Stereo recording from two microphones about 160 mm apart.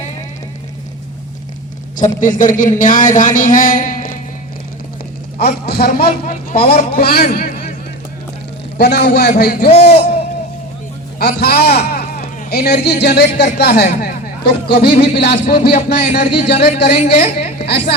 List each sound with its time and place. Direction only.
2.2 s a man's voice: 55° left (ahead or behind)
5.4 s a man's voice: 75° left (ahead or behind)
8.8 s a man's voice: 90° left
9.4 s speech: 75° left (ahead or behind)
11.2 s a man's voice: 85° left
15.7 s a man's voice: 55° left (ahead or behind)
16.1 s a man's voice: 85° left